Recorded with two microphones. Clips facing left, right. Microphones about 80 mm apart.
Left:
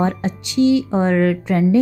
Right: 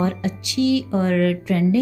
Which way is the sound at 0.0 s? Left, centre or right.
Left.